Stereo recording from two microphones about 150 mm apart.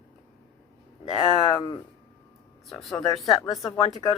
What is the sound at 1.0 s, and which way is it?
Speech, 35° left (ahead or behind).